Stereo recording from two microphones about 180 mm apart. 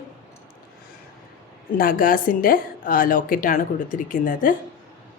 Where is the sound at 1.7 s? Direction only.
50° left (ahead or behind).